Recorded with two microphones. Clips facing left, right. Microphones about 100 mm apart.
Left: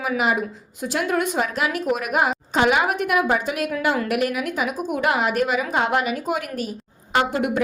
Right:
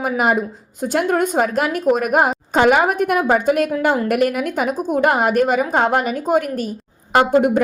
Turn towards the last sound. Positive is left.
turn(degrees=-45)  # may be behind; listen again after turning